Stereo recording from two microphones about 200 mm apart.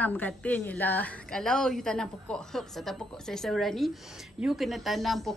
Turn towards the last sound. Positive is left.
turn(degrees=0)  # may be behind; listen again after turning